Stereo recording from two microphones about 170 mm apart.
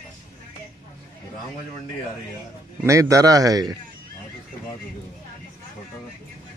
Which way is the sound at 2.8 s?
20° right (ahead or behind).